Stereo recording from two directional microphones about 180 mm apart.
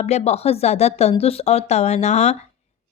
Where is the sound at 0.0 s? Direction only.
40° left (ahead or behind).